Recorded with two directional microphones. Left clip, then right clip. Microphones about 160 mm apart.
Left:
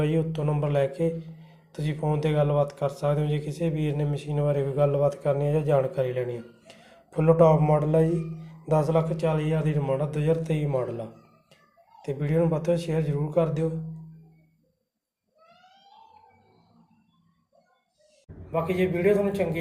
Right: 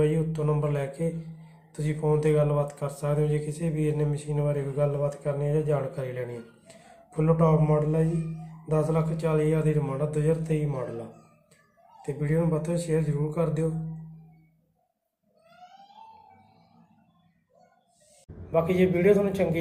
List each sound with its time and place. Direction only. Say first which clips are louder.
0.0 s speech: right 1 dB; 20° left (ahead or behind)
12.0 s speech: left 3 dB; 20° left (ahead or behind)
18.5 s a man's voice: right 2 dB; 5° right (ahead or behind)